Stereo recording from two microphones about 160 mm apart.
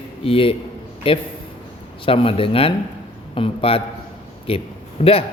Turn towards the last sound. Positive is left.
turn(degrees=35)  # may be behind; listen again after turning